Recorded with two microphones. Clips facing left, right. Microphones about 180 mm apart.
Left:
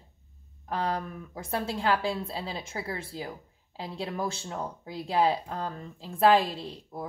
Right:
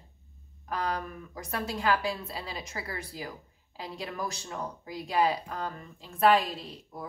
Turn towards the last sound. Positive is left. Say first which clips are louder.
# left 4 dB
turn(degrees=30)  # may be behind; listen again after turning